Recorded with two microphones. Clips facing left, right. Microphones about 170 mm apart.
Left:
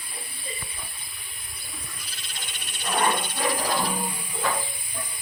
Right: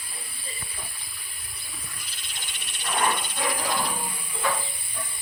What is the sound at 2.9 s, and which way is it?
Hiss, 45° left (ahead or behind).